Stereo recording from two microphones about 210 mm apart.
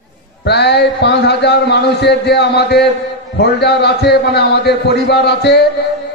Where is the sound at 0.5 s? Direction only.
50° left (ahead or behind).